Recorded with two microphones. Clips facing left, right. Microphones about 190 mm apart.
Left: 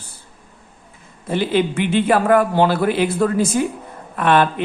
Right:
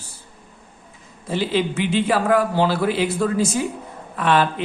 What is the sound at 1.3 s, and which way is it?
Speech, 55° left (ahead or behind).